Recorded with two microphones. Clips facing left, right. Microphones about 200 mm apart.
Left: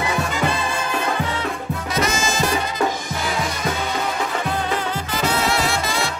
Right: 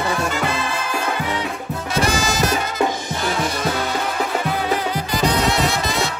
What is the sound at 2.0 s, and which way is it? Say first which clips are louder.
Music: right 2 dB; 35° right (ahead or behind).